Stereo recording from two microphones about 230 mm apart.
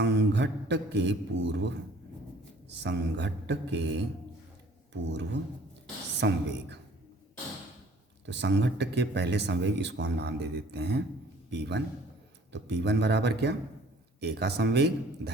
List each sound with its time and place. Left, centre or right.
0.0 s speech: right
5.0 s speech: right
8.3 s speech: right